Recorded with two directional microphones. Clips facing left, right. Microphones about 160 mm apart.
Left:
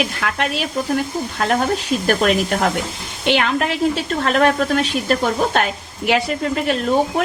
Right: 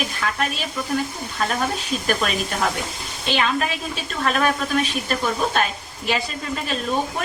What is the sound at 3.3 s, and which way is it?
A woman's voice, 70° left (ahead or behind).